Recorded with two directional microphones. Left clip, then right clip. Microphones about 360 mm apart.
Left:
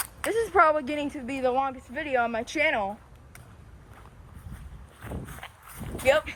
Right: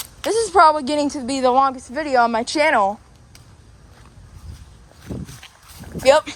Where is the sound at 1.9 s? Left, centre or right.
Right.